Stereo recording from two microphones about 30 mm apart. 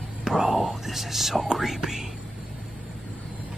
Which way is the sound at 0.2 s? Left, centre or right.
Centre.